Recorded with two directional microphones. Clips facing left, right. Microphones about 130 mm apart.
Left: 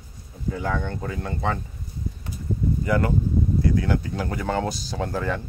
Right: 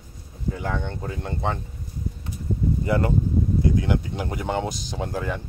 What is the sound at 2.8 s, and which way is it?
Speech, 25° right (ahead or behind).